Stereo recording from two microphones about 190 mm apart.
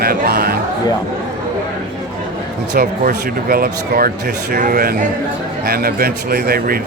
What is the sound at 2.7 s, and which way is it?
Speech, 55° right (ahead or behind).